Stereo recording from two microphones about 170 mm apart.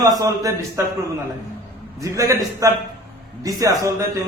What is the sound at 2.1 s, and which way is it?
A man's voice, 20° right (ahead or behind).